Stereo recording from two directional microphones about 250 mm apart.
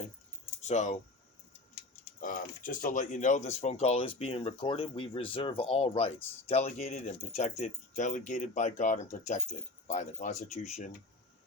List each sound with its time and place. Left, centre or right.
0.7 s speech: left
2.2 s speech: left